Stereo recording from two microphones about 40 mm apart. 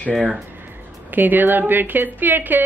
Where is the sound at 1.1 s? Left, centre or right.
Right.